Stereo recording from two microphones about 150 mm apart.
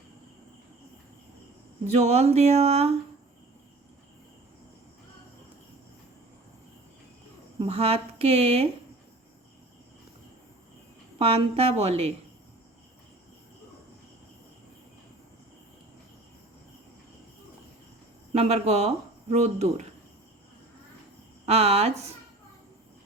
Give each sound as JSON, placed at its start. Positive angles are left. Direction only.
{"t": 1.9, "sound": "speech", "side_deg": -45}
{"t": 7.6, "sound": "a woman's voice", "side_deg": -40}
{"t": 11.2, "sound": "a woman's voice", "side_deg": -40}
{"t": 18.3, "sound": "speech", "side_deg": -45}
{"t": 21.4, "sound": "speech", "side_deg": -45}